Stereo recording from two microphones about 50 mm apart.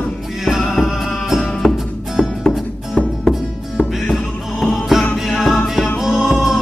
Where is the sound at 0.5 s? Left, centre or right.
Centre.